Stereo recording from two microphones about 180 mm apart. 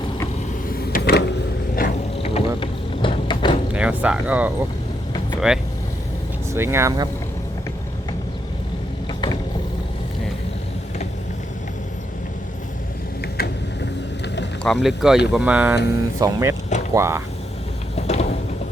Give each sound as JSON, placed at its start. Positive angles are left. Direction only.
{"t": 0.8, "sound": "power windows", "side_deg": 60}
{"t": 1.8, "sound": "mechanisms", "side_deg": 50}
{"t": 2.2, "sound": "music", "side_deg": 30}
{"t": 3.8, "sound": "speech", "side_deg": -5}
{"t": 13.2, "sound": "a sound", "side_deg": 60}
{"t": 14.6, "sound": "speech", "side_deg": 0}
{"t": 17.9, "sound": "a sound", "side_deg": 35}